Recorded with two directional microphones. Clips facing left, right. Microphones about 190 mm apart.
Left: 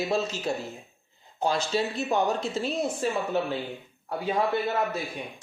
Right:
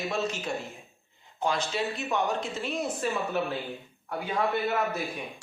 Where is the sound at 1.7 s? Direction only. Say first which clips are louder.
Left 4 dB; 35° left (ahead or behind).